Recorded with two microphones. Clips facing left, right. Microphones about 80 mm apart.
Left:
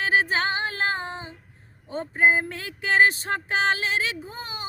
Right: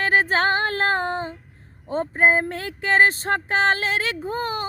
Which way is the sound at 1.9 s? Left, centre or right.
Right.